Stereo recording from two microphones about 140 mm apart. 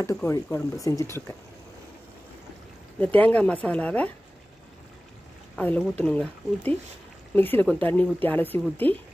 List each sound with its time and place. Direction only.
0.0 s speech: 20° left (ahead or behind)
3.0 s speech: 10° left (ahead or behind)
5.6 s speech: 10° left (ahead or behind)